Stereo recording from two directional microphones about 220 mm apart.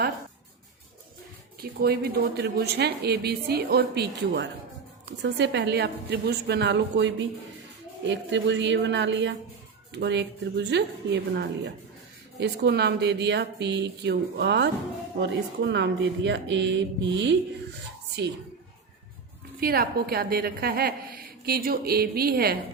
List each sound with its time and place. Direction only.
1.6 s a woman's voice: 45° right (ahead or behind)
19.5 s a woman's voice: 45° right (ahead or behind)